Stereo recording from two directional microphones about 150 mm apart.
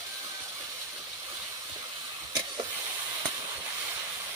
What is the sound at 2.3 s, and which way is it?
Vehicle, 30° right (ahead or behind).